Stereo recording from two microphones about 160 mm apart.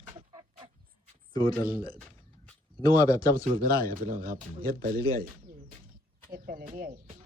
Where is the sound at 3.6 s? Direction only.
65° right (ahead or behind).